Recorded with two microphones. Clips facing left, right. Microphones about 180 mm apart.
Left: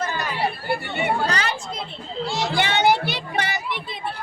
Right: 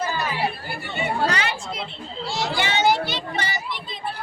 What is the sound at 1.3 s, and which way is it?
Speech, 40° left (ahead or behind).